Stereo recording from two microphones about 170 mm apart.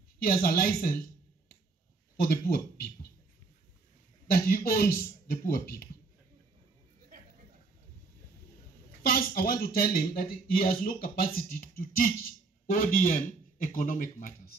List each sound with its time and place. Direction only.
0.2 s speech: 60° left (ahead or behind)
2.1 s speech: 60° left (ahead or behind)
4.3 s speech: 60° left (ahead or behind)
9.0 s a man's voice: 60° left (ahead or behind)